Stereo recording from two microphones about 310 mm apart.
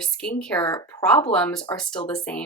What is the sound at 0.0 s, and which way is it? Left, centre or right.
A woman's voice, centre.